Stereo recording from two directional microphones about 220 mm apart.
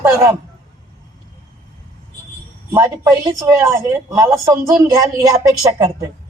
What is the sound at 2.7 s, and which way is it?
Speech, 15° right (ahead or behind).